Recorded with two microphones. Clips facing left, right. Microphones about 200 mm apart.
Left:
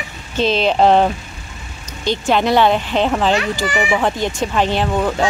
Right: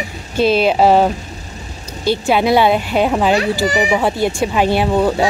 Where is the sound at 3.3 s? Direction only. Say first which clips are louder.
Right 3 dB; 35° right (ahead or behind).